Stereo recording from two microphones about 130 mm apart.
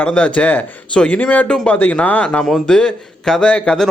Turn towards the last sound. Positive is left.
turn(degrees=5)  # may be behind; listen again after turning